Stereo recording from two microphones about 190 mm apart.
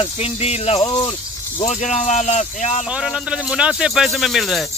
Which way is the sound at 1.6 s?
35° left (ahead or behind).